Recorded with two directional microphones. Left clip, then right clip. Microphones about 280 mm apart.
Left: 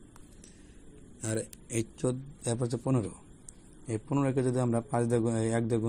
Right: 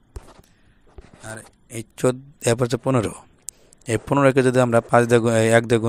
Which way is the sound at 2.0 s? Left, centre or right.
Right.